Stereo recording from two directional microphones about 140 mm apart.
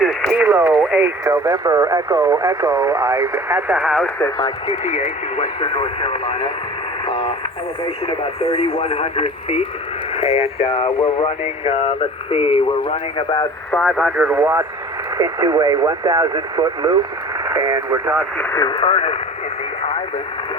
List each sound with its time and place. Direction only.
0.0 s radio: centre (ahead or behind)
0.4 s speech: 15° right (ahead or behind)
3.8 s speech: centre (ahead or behind)
4.4 s speech: 35° left (ahead or behind)
4.9 s speech: 55° left (ahead or behind)
8.0 s speech: 40° left (ahead or behind)
13.7 s speech: 5° left (ahead or behind)
14.2 s speech: 10° right (ahead or behind)
15.2 s speech: 25° right (ahead or behind)
18.5 s speech: 35° left (ahead or behind)